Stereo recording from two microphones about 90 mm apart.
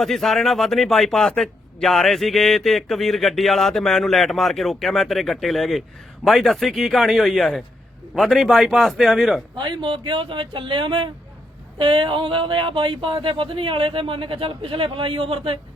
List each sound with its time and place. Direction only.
0.0 s speech: 5° left (ahead or behind)
9.6 s speech: 65° right (ahead or behind); by 15.5 s 85° right